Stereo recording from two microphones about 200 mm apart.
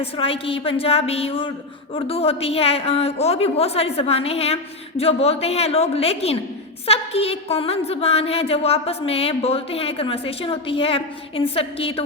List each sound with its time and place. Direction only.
0.0 s a woman's voice: 25° left (ahead or behind)